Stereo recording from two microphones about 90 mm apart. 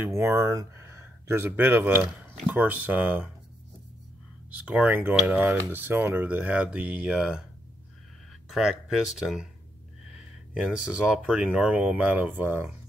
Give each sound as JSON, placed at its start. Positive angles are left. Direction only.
{"t": 0.1, "sound": "speech", "side_deg": -30}
{"t": 4.5, "sound": "speech", "side_deg": -15}